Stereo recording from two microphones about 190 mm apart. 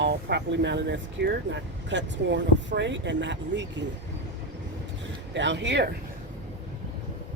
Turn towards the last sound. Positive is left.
turn(degrees=-65)  # may be behind; listen again after turning